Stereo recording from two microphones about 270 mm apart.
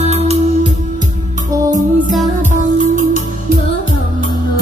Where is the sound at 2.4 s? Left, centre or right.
Right.